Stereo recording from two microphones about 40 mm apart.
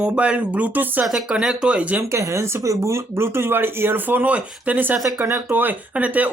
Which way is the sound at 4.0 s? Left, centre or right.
Right.